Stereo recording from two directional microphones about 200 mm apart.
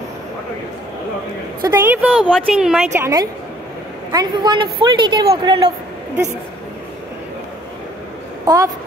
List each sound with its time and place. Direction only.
1.6 s a woman's voice: 15° right (ahead or behind)
8.5 s a woman's voice: 20° right (ahead or behind)